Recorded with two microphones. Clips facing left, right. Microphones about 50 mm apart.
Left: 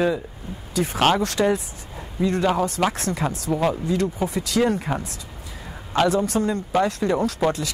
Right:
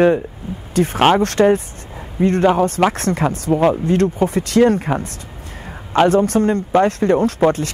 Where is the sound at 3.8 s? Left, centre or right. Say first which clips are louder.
Right 7 dB; right.